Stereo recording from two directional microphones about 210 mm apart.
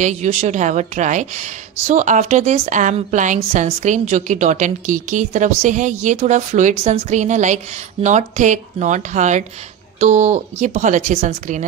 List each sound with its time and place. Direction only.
0.0 s a woman's voice: 35° right (ahead or behind)